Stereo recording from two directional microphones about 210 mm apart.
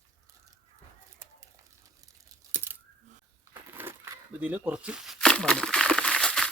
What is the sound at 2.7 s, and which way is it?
Coin, 10° right (ahead or behind).